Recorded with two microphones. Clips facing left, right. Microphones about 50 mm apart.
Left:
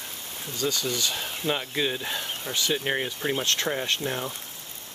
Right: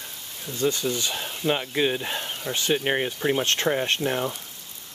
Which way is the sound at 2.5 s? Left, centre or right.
Right.